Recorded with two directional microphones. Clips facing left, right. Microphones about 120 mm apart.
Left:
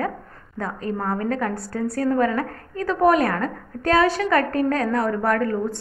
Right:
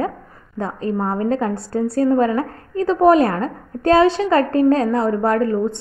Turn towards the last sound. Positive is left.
turn(degrees=-25)  # may be behind; listen again after turning